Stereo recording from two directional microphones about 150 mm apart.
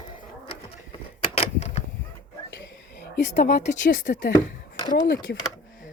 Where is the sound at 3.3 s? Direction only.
55° left (ahead or behind).